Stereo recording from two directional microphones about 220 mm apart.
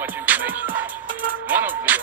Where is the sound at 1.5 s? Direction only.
5° right (ahead or behind).